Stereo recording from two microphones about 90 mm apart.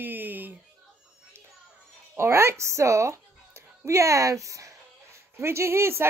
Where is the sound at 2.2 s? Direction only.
30° right (ahead or behind).